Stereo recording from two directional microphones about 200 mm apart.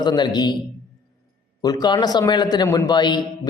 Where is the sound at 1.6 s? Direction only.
20° left (ahead or behind).